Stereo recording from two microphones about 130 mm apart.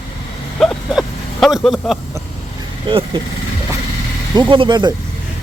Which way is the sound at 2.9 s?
40° right (ahead or behind).